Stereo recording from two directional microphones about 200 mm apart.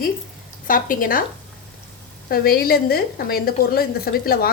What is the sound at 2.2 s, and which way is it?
A woman's voice, 50° left (ahead or behind).